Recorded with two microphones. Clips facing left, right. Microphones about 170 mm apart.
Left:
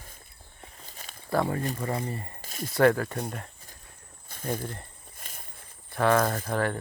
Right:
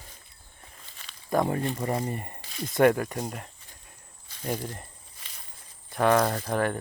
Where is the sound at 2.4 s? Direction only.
45° left (ahead or behind).